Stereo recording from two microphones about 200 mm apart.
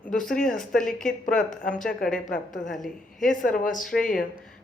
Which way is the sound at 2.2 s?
40° left (ahead or behind).